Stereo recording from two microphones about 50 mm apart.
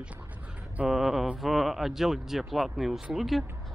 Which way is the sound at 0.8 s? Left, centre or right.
Centre.